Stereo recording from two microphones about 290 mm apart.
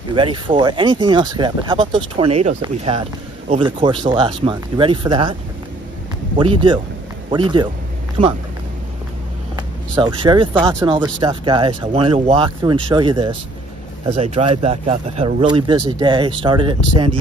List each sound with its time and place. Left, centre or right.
0.1 s speech: centre
6.3 s speech: centre
9.9 s speech: centre